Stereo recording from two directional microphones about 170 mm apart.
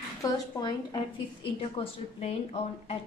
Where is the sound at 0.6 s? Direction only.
25° left (ahead or behind).